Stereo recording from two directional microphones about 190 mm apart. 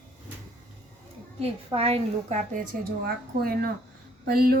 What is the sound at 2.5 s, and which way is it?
Speech, 50° right (ahead or behind).